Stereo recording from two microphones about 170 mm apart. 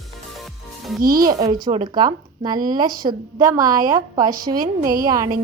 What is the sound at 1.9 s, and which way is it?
Speech, 25° right (ahead or behind).